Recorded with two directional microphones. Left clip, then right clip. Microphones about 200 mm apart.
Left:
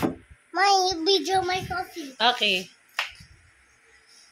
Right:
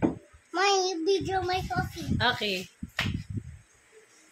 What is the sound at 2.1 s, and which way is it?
Speech, centre (ahead or behind).